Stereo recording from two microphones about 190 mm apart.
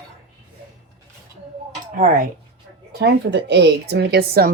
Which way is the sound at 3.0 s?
65° right (ahead or behind).